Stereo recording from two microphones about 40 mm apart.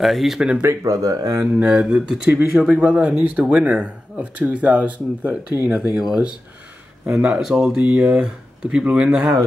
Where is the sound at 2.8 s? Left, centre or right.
Right.